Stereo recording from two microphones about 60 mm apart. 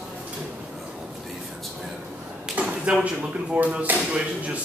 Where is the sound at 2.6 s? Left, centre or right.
Centre.